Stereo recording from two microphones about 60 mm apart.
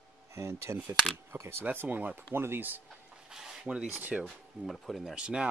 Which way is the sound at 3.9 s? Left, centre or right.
Right.